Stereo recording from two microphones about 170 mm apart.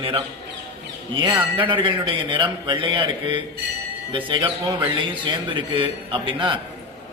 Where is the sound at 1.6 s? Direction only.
30° right (ahead or behind).